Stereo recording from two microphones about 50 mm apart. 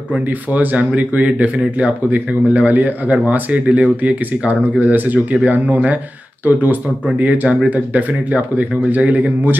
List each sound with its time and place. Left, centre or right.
0.1 s speech: right